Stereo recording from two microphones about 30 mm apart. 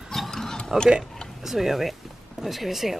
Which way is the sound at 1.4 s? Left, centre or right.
Centre.